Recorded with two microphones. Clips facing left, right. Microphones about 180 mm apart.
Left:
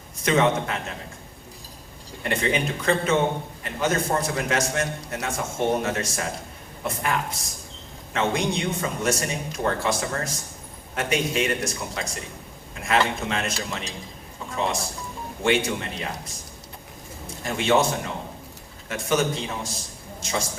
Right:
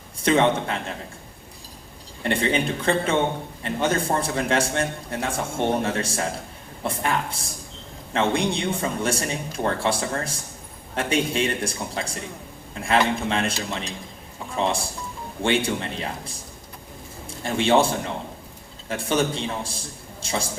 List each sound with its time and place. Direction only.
0.2 s a man's voice: 30° right (ahead or behind)
2.2 s a man's voice: 30° right (ahead or behind)
13.3 s a man's voice: 30° right (ahead or behind)